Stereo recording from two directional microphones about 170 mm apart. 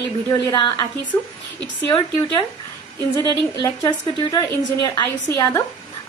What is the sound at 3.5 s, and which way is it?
A woman's voice, 20° left (ahead or behind).